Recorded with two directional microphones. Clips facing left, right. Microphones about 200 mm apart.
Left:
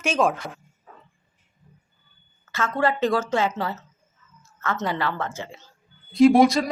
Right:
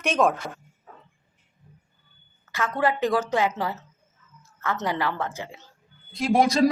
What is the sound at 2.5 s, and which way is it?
Speech, 15° right (ahead or behind).